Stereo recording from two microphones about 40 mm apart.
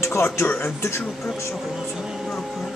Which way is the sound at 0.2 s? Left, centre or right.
Left.